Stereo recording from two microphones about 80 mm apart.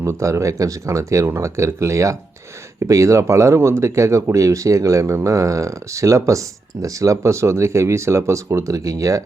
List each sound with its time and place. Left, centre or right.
0.0 s speech: right